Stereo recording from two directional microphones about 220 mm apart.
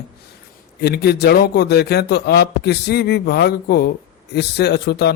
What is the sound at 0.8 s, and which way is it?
Speech, 45° left (ahead or behind).